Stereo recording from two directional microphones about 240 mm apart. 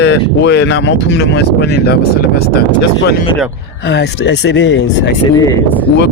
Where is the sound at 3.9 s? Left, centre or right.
Left.